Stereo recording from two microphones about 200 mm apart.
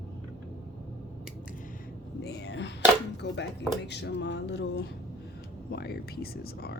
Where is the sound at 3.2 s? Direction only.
60° left (ahead or behind).